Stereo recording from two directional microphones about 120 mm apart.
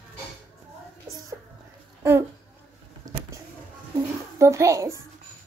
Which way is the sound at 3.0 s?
30° right (ahead or behind).